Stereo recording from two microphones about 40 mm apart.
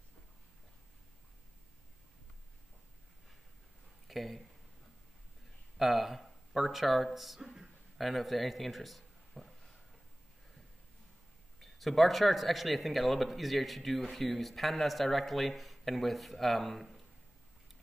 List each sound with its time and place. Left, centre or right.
4.1 s speech: centre
5.8 s speech: centre
11.6 s speech: centre